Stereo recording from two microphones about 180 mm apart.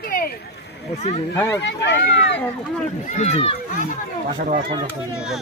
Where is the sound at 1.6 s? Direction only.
75° left (ahead or behind).